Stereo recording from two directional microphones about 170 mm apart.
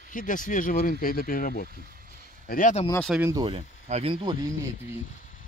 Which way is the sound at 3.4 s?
35° right (ahead or behind).